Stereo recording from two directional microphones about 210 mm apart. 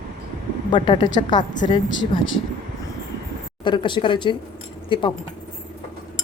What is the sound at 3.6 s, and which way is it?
Speech, 20° left (ahead or behind).